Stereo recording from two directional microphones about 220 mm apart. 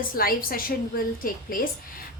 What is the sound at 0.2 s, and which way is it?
Child singing, 40° left (ahead or behind).